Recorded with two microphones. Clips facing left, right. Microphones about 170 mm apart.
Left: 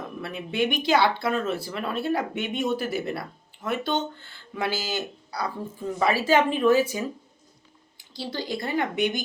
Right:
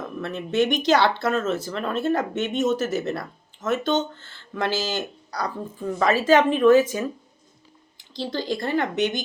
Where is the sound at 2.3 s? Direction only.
10° left (ahead or behind).